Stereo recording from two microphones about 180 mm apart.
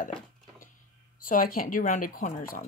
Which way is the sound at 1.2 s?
50° left (ahead or behind).